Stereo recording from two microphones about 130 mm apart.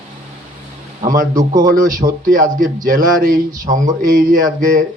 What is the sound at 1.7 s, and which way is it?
Speech, 90° right.